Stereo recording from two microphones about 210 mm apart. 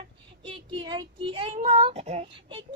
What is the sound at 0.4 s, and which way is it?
Speech, 25° right (ahead or behind).